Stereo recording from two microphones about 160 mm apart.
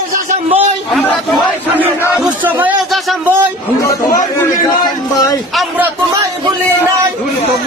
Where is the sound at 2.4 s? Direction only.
10° right (ahead or behind).